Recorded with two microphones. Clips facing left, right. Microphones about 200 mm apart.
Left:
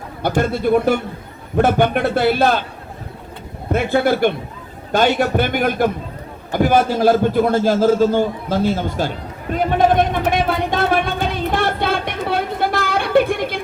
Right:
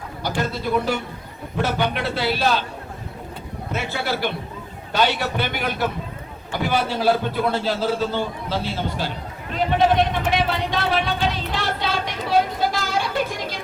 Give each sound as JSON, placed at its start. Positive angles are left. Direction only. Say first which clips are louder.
{"t": 0.2, "sound": "a man's voice", "louder": "left 7 dB", "side_deg": 55}
{"t": 3.7, "sound": "a man's voice", "louder": "left 10 dB", "side_deg": 55}
{"t": 6.5, "sound": "a sound", "louder": "left 7 dB", "side_deg": 45}